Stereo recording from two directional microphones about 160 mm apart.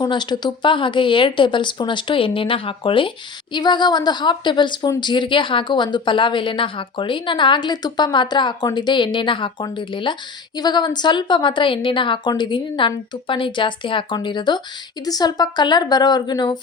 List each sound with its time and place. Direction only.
0.0 s speech: 30° left (ahead or behind)